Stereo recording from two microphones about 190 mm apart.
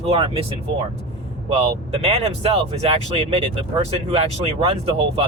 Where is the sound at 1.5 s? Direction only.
35° right (ahead or behind).